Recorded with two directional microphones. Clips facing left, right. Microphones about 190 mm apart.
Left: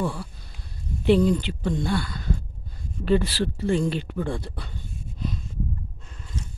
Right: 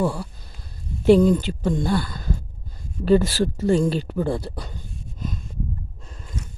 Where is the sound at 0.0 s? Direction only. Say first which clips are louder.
Right 5 dB; 40° right (ahead or behind).